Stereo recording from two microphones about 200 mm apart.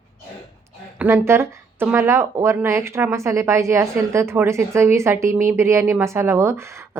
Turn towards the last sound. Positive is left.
turn(degrees=-15)  # may be behind; listen again after turning